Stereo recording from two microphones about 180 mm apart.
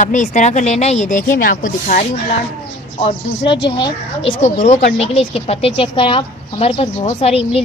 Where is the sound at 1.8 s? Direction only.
40° left (ahead or behind).